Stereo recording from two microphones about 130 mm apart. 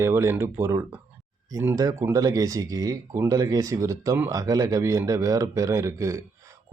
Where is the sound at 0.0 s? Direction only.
20° right (ahead or behind).